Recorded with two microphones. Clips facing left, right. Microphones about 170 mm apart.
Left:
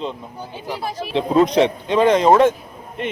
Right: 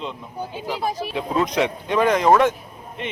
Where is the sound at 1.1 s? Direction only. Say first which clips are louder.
Left 9 dB; 30° left (ahead or behind).